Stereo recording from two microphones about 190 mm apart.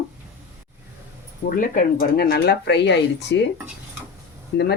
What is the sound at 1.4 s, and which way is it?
Speech, 50° left (ahead or behind).